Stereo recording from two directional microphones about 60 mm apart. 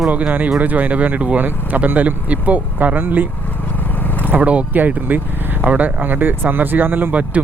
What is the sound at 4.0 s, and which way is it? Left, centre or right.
Vehicle, left.